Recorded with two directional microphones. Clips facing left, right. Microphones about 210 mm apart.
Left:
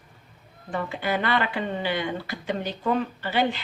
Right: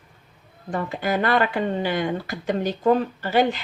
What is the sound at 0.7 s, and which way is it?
Speech, 45° right (ahead or behind).